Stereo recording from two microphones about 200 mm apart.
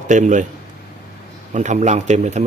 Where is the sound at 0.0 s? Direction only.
40° right (ahead or behind).